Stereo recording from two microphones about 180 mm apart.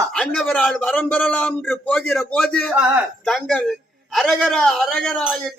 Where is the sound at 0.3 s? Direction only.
5° left (ahead or behind).